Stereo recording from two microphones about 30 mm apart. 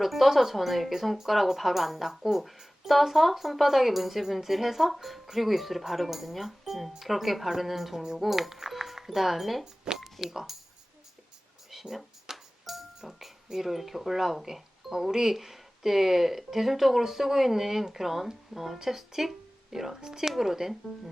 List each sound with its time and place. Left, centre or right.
0.0 s speech: centre
10.0 s music: centre
10.3 s speech: centre
11.7 s a sound: centre
12.3 s music: centre
13.0 s speech: centre